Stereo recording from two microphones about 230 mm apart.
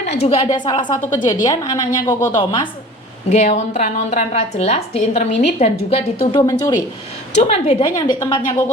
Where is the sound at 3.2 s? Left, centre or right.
Left.